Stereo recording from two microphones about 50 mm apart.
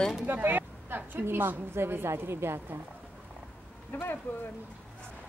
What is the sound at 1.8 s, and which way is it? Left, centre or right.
Speech, right.